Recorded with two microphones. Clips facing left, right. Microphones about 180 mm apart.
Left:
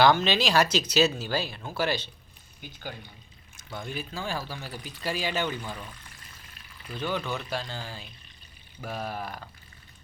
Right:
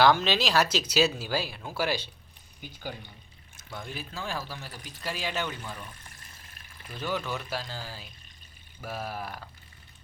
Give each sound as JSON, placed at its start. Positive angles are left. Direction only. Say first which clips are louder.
{"t": 0.0, "sound": "speech", "louder": "left 1 dB", "side_deg": 0}
{"t": 3.7, "sound": "speech", "louder": "left 3 dB", "side_deg": 0}
{"t": 6.5, "sound": "pour", "louder": "left 1 dB", "side_deg": -50}
{"t": 6.9, "sound": "speech", "louder": "left 1 dB", "side_deg": -5}